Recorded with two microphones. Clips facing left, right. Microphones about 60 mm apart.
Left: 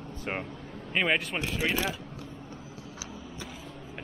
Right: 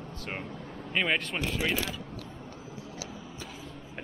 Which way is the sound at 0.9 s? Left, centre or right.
Centre.